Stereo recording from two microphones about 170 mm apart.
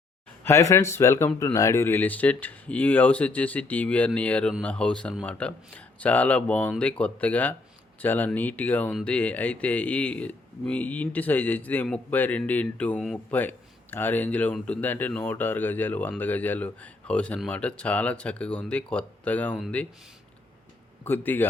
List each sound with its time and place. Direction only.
0.4 s speech: 15° left (ahead or behind)
21.0 s speech: 10° left (ahead or behind)